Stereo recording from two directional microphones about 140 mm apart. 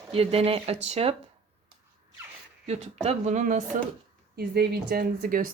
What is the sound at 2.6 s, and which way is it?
Speech, 50° right (ahead or behind).